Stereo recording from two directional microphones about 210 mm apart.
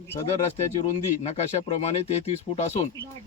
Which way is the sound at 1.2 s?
30° left (ahead or behind).